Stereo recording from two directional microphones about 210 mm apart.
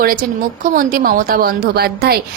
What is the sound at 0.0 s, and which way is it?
Speech, 45° right (ahead or behind).